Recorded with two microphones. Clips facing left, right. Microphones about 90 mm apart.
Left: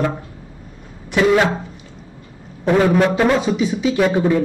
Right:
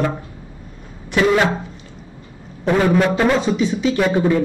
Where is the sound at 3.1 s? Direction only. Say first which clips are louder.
Even; 10° left (ahead or behind).